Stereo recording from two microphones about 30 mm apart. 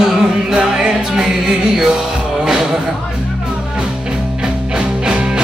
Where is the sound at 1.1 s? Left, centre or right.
Right.